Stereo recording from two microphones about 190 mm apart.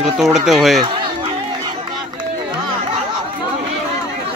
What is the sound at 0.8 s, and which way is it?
Run, 25° right (ahead or behind).